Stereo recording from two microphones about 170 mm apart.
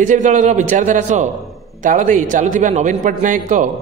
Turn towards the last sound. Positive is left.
turn(degrees=-50)  # may be behind; listen again after turning